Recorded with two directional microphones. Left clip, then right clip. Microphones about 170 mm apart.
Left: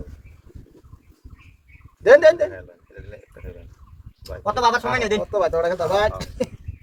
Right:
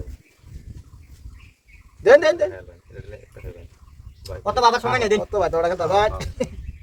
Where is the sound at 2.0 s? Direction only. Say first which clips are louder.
Left 2 dB; 15° right (ahead or behind).